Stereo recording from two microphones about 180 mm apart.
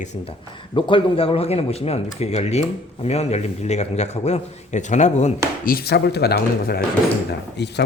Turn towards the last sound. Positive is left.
turn(degrees=70)  # may be behind; listen again after turning